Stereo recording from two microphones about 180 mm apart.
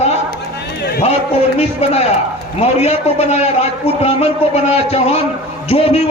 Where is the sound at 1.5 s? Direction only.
35° left (ahead or behind).